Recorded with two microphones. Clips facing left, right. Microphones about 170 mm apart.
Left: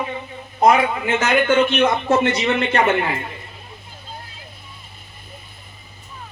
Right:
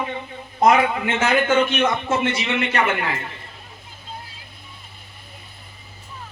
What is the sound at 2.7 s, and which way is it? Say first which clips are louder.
Speech: left 4 dB; 25° left (ahead or behind).